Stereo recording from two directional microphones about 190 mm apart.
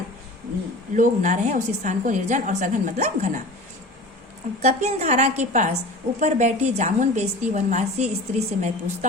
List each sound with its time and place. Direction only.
0.9 s a woman's voice: 40° right (ahead or behind)
4.6 s a woman's voice: 35° right (ahead or behind)